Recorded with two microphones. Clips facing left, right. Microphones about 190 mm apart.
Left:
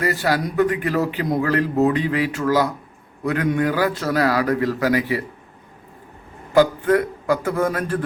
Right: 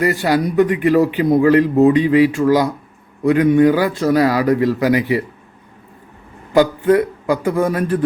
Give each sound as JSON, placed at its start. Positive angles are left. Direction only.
{"t": 0.0, "sound": "a man's voice", "side_deg": -15}
{"t": 6.6, "sound": "a man's voice", "side_deg": -15}